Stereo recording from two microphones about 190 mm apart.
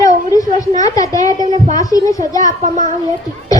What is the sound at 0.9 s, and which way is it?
A child's voice, 20° left (ahead or behind).